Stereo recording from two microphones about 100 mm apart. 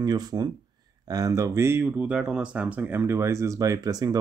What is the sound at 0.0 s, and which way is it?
Speech, 45° right (ahead or behind).